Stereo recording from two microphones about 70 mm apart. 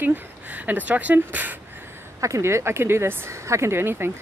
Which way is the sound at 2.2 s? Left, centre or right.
Right.